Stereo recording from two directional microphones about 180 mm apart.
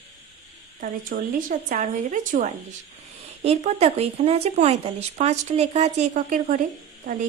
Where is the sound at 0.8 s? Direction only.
50° right (ahead or behind).